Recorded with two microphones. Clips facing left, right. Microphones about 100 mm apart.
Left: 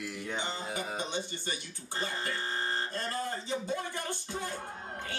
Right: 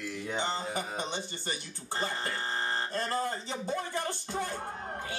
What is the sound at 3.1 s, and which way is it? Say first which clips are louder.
A man's voice: right 2 dB; 30° right (ahead or behind).